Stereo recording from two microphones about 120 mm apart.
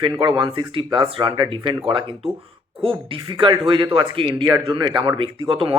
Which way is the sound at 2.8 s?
45° right (ahead or behind).